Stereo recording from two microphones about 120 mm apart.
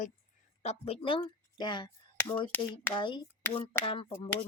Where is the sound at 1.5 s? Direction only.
40° left (ahead or behind).